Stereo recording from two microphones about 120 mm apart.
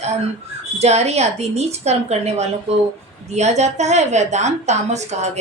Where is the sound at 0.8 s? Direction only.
65° right (ahead or behind).